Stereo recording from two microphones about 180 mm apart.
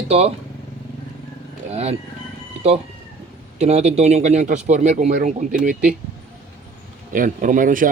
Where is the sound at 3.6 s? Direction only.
35° right (ahead or behind).